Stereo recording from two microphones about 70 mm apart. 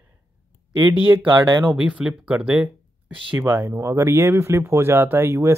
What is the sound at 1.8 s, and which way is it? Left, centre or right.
Speech, centre.